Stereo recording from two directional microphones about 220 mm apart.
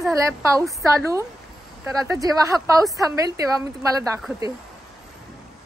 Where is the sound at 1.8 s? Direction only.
15° right (ahead or behind).